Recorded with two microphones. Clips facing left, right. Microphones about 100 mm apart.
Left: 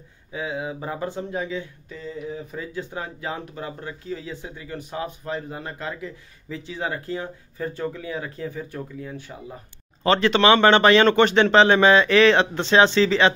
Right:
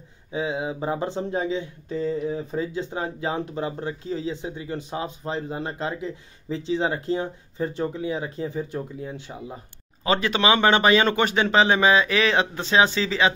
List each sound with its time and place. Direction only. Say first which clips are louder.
0.3 s speech: right 2 dB; 25° right (ahead or behind)
10.0 s speech: left 4 dB; 10° right (ahead or behind)